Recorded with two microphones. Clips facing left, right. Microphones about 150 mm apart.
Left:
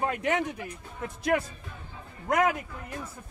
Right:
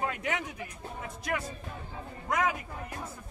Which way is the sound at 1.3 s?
60° left (ahead or behind).